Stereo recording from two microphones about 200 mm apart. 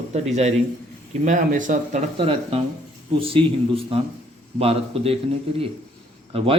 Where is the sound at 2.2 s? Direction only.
30° right (ahead or behind).